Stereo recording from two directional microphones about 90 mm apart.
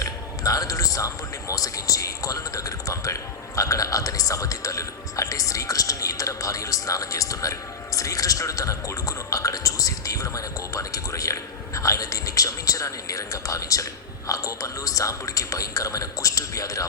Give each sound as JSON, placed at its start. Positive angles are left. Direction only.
{"t": 0.0, "sound": "speech", "side_deg": 40}